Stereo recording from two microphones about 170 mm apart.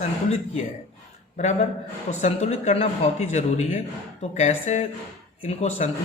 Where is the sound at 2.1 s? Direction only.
40° left (ahead or behind).